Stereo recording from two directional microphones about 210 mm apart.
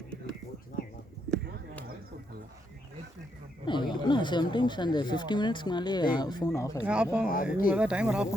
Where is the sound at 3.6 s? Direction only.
20° left (ahead or behind).